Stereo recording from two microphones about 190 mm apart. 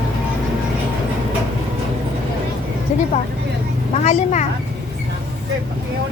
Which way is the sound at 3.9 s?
40° left (ahead or behind).